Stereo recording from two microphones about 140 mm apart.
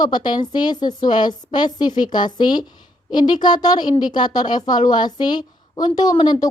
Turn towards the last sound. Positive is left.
turn(degrees=30)  # may be behind; listen again after turning